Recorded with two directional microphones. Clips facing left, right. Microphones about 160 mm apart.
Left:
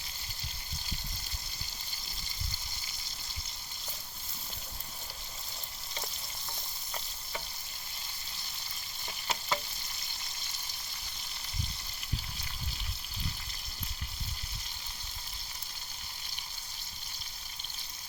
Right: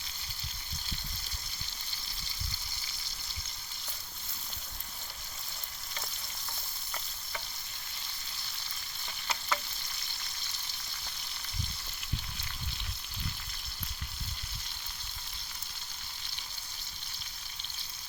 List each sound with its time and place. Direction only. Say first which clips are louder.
9.2 s frying: left 1 dB; 20° left (ahead or behind)